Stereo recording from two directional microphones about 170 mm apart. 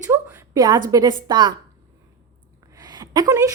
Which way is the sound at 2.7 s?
25° right (ahead or behind).